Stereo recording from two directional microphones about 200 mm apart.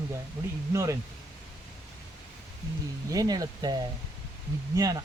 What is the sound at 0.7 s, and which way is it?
Speech, 15° right (ahead or behind).